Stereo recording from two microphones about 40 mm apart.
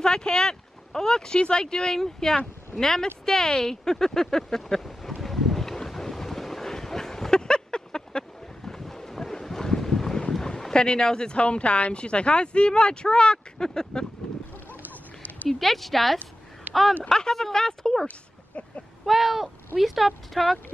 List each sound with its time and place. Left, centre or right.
0.0 s speech: centre
3.3 s a sound: centre
10.3 s speech: centre
15.4 s speech: centre
19.0 s speech: centre